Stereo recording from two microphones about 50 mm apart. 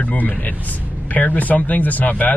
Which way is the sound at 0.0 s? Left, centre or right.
Left.